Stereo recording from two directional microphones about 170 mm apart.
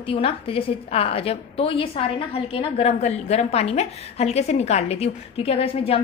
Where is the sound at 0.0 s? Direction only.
30° left (ahead or behind).